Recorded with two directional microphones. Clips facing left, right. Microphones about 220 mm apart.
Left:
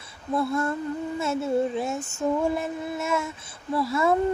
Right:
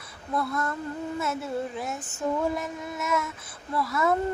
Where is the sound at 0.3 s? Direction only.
25° left (ahead or behind).